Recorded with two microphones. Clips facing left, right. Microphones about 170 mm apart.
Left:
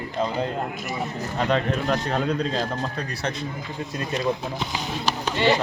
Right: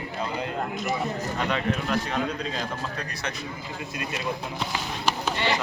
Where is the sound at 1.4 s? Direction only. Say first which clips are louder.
Left 5 dB; 35° left (ahead or behind).